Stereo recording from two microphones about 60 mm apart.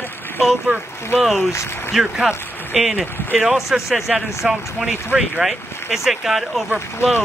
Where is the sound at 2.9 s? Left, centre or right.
Right.